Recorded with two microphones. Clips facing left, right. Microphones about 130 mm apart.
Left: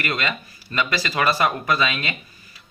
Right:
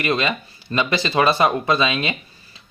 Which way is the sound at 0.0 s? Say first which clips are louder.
Right 5 dB; 20° right (ahead or behind).